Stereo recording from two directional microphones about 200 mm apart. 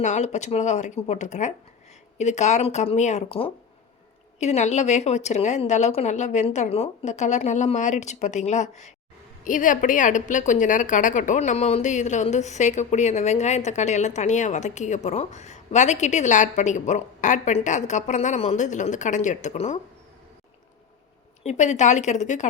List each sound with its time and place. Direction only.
0.0 s a woman's voice: 35° left (ahead or behind)
21.4 s a woman's voice: 35° left (ahead or behind)